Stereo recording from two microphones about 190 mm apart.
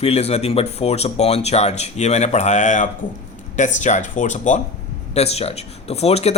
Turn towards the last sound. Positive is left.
turn(degrees=35)  # may be behind; listen again after turning